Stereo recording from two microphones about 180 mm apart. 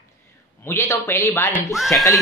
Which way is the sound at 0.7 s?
15° left (ahead or behind).